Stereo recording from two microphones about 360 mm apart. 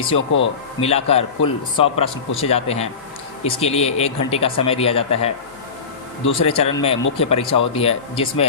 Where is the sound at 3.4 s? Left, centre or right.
Centre.